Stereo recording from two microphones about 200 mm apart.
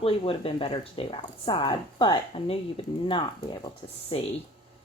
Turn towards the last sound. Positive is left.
turn(degrees=25)  # may be behind; listen again after turning